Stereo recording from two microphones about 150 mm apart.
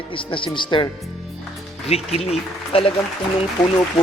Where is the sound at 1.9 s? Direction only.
45° left (ahead or behind).